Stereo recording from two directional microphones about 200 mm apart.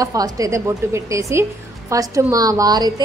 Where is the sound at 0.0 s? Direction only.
15° right (ahead or behind).